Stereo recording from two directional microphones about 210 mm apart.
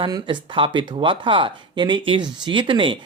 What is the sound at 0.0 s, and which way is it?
Speech, 25° right (ahead or behind).